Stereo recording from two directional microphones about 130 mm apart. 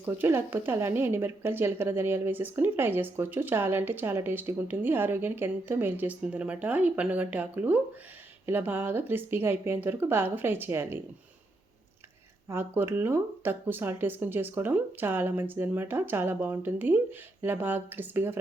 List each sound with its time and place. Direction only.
0.0 s speech: 15° right (ahead or behind)
12.5 s speech: 15° right (ahead or behind)